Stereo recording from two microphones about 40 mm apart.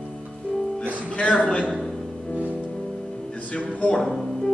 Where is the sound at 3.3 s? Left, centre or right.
Left.